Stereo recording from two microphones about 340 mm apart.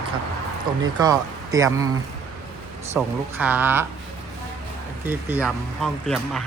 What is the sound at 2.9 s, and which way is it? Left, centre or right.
Speech, centre.